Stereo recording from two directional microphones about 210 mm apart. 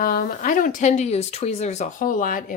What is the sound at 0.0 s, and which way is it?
Speech, 40° left (ahead or behind).